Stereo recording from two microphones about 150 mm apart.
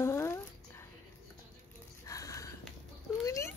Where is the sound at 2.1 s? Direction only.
20° left (ahead or behind).